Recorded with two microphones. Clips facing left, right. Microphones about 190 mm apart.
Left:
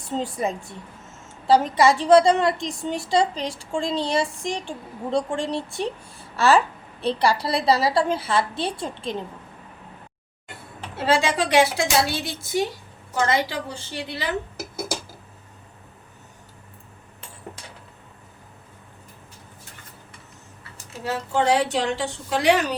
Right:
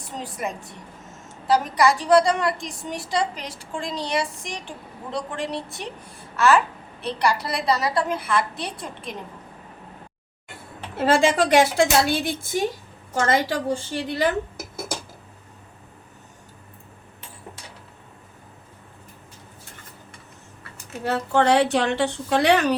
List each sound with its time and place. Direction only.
0.1 s a woman's voice: 25° left (ahead or behind)
1.5 s a woman's voice: 25° left (ahead or behind)
10.9 s a woman's voice: 50° right (ahead or behind)
21.0 s a woman's voice: 65° right (ahead or behind)